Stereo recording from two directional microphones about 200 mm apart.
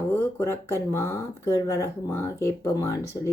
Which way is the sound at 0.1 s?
15° left (ahead or behind).